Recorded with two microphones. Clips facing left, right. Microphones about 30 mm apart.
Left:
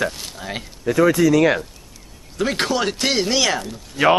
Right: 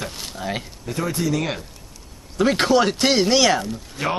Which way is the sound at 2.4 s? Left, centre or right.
Centre.